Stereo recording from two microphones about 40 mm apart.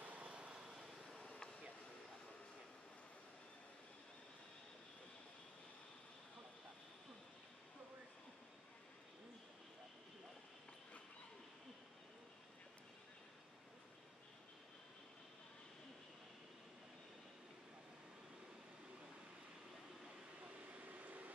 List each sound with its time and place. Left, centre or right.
0.0 s vehicle: right
0.3 s vehicle: right
1.2 s a sound: left
20.7 s vehicle: right